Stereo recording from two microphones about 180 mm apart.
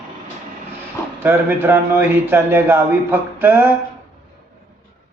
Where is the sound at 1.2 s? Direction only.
10° right (ahead or behind).